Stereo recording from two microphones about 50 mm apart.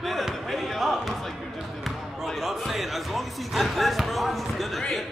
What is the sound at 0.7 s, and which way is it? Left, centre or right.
Music, centre.